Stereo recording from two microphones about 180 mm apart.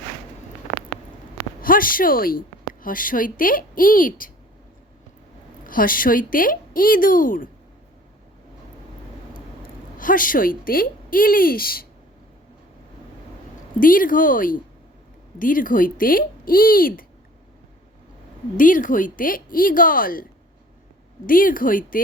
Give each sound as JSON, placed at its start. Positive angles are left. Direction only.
{"t": 1.6, "sound": "a woman's voice", "side_deg": 50}
{"t": 5.6, "sound": "a woman's voice", "side_deg": 50}
{"t": 10.0, "sound": "a woman's voice", "side_deg": 50}
{"t": 13.7, "sound": "a woman's voice", "side_deg": 50}
{"t": 18.5, "sound": "a woman's voice", "side_deg": 45}
{"t": 21.2, "sound": "a woman's voice", "side_deg": 50}